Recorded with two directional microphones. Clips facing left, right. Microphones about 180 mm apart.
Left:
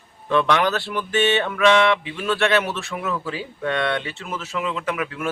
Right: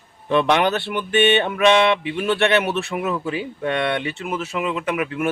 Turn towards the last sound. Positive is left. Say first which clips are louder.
# right 3 dB
turn(degrees=-15)  # may be behind; listen again after turning